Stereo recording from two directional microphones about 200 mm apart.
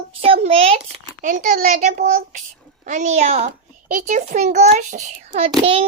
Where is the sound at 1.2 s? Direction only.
45° right (ahead or behind).